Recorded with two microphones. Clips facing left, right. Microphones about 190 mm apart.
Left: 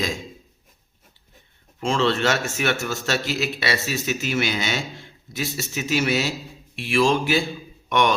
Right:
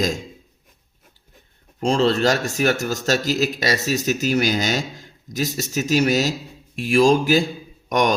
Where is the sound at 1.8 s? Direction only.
40° right (ahead or behind).